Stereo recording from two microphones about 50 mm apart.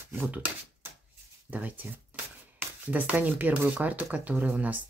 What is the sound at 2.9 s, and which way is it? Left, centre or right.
Speech, right.